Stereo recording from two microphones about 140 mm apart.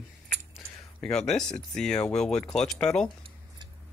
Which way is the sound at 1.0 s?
5° left (ahead or behind).